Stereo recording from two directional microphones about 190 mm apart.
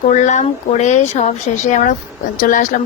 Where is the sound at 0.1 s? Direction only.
40° left (ahead or behind).